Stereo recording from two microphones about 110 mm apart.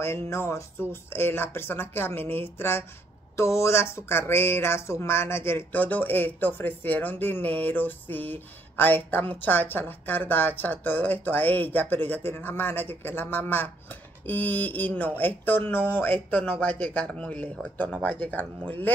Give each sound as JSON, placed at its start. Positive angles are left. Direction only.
{"t": 0.0, "sound": "speech", "side_deg": 25}